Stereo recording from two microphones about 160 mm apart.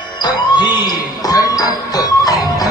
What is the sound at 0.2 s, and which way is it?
Music, 25° left (ahead or behind).